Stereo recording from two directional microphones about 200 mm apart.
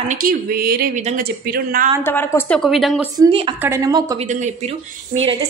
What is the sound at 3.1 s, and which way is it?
A woman's voice, 25° right (ahead or behind).